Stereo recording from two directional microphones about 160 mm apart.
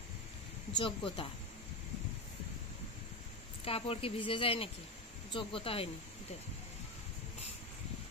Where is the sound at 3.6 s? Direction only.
35° left (ahead or behind).